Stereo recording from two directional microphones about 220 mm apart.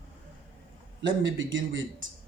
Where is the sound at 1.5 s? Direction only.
60° right (ahead or behind).